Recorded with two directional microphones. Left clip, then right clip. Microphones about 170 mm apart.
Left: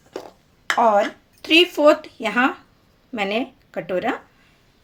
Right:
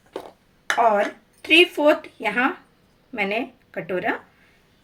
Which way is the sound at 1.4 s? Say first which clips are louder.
Left 1 dB; 55° left (ahead or behind).